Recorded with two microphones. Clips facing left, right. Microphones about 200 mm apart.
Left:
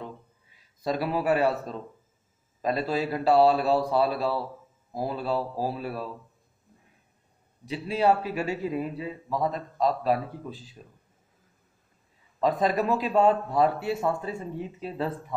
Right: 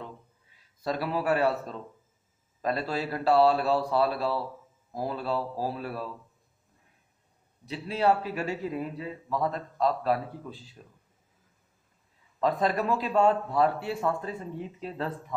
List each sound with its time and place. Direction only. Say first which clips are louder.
0.8 s a man's voice: left 2 dB; 15° left (ahead or behind)
7.6 s a man's voice: left 2 dB; 15° left (ahead or behind)
12.4 s a man's voice: left 2 dB; 15° left (ahead or behind)